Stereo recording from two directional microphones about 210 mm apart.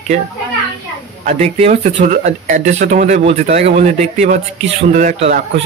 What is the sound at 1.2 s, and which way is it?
Speech, 30° right (ahead or behind).